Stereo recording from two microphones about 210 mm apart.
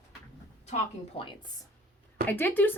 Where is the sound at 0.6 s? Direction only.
30° left (ahead or behind).